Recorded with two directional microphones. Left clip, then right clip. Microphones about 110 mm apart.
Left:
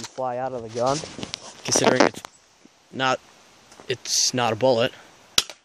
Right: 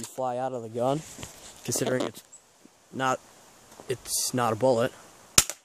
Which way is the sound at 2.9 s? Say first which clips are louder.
Left 4 dB; 5° left (ahead or behind).